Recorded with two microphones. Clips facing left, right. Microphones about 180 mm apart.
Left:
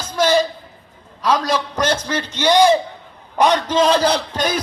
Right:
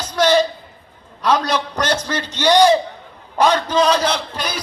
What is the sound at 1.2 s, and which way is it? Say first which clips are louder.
Speech: even; 5° left (ahead or behind).